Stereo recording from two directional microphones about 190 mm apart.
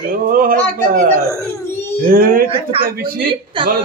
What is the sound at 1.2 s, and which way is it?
Crying, 15° left (ahead or behind).